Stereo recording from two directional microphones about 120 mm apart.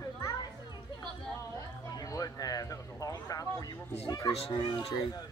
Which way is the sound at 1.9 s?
30° left (ahead or behind).